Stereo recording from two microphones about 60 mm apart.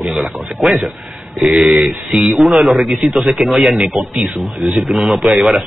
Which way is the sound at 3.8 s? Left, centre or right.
Centre.